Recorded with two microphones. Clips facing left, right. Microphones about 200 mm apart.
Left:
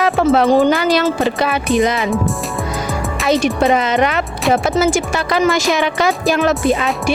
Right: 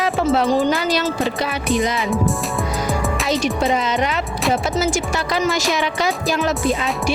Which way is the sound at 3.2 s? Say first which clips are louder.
Left 7 dB; 60° left (ahead or behind).